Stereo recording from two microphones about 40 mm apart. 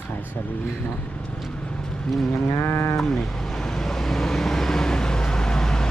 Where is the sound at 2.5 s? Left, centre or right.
Left.